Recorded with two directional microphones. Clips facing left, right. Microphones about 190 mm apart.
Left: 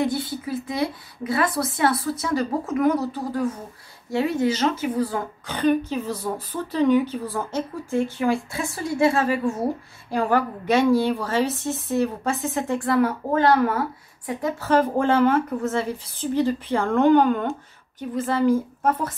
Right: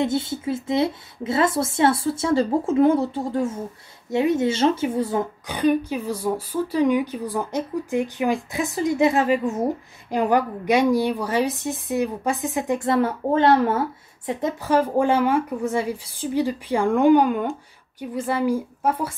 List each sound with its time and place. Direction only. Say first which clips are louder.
0.0 s speech: right 2 dB; 25° right (ahead or behind)
14.7 s speech: even; 10° right (ahead or behind)